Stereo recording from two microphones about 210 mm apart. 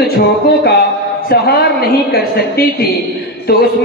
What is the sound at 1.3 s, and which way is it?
A woman's voice, 50° left (ahead or behind).